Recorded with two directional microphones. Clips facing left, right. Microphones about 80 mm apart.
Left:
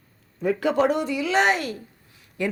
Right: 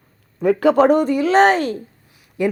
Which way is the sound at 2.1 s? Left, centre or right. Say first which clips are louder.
Right 7 dB; centre.